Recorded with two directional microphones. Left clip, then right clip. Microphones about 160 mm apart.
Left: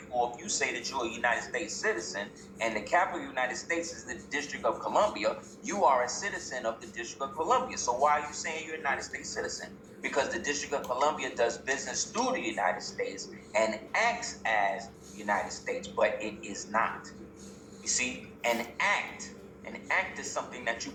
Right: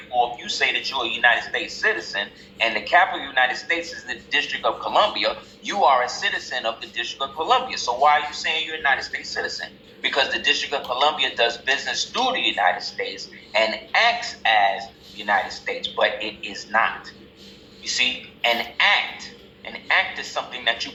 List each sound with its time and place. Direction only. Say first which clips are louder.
0.2 s speech: right 9 dB; 20° left (ahead or behind)